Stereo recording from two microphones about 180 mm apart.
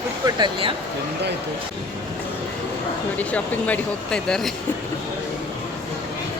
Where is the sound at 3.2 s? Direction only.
10° left (ahead or behind).